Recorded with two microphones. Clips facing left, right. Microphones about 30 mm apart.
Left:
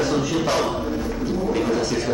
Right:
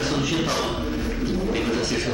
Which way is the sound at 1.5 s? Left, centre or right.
Centre.